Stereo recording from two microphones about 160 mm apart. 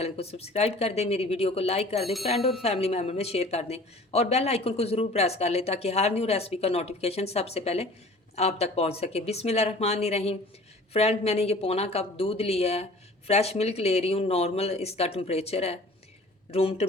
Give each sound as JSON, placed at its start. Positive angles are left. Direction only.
{"t": 0.0, "sound": "speech", "side_deg": 40}
{"t": 2.0, "sound": "speech", "side_deg": 0}
{"t": 2.2, "sound": "speech", "side_deg": 40}